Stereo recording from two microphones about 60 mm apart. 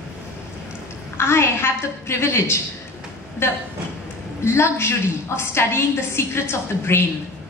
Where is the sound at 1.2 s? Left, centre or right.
Left.